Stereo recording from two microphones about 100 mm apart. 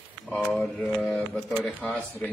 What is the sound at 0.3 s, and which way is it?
Speech, 10° left (ahead or behind).